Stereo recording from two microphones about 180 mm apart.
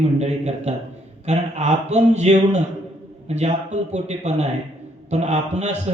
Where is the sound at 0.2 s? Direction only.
40° right (ahead or behind).